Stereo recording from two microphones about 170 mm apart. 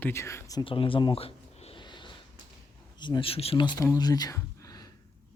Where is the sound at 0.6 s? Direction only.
30° left (ahead or behind).